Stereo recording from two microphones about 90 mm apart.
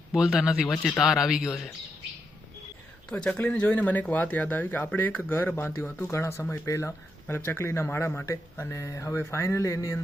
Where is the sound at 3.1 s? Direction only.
10° left (ahead or behind).